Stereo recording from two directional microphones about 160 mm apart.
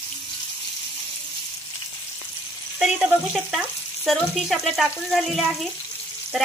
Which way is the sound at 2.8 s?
5° right (ahead or behind).